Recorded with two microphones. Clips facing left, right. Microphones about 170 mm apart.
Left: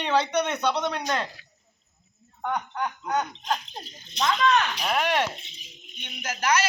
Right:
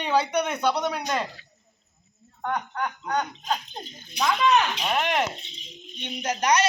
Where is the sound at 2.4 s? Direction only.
10° left (ahead or behind).